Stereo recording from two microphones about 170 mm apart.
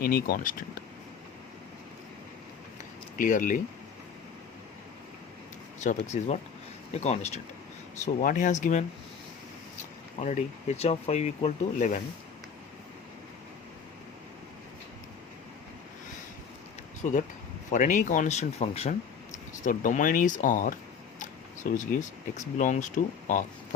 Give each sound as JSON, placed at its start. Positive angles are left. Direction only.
{"t": 0.0, "sound": "speech", "side_deg": 60}
{"t": 3.2, "sound": "speech", "side_deg": 50}
{"t": 5.8, "sound": "speech", "side_deg": 45}
{"t": 10.2, "sound": "speech", "side_deg": 40}
{"t": 17.7, "sound": "speech", "side_deg": 50}
{"t": 19.6, "sound": "speech", "side_deg": 50}
{"t": 21.2, "sound": "a sound", "side_deg": 50}
{"t": 22.5, "sound": "speech", "side_deg": 45}